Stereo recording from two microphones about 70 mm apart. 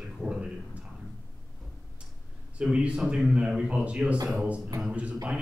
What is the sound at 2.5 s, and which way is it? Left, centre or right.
A man's voice, centre.